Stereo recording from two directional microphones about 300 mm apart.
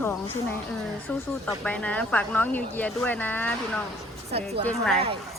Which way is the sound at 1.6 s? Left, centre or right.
Centre.